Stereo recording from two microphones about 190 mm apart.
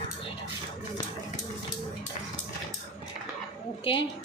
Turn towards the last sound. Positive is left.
turn(degrees=30)  # may be behind; listen again after turning